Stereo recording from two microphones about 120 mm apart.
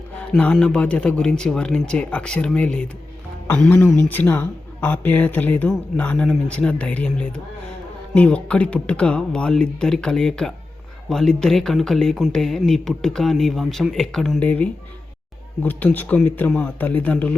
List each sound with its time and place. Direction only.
0.3 s a man's voice: 10° left (ahead or behind)